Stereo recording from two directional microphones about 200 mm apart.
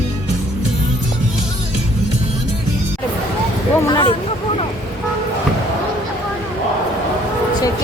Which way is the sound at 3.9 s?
25° left (ahead or behind).